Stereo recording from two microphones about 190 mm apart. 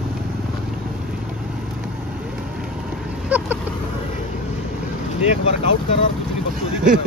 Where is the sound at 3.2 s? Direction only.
10° right (ahead or behind).